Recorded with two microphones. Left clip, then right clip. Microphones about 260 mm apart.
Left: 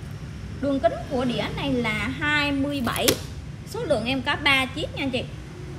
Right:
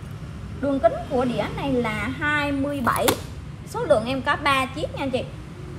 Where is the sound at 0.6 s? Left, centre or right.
Centre.